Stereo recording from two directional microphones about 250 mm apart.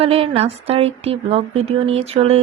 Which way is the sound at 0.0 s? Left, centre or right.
Right.